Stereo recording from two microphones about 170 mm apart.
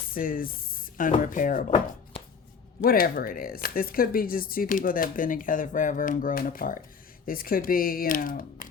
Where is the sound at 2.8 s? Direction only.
60° left (ahead or behind).